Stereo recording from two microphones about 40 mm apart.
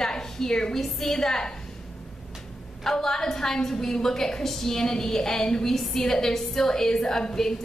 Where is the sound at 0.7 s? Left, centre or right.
Centre.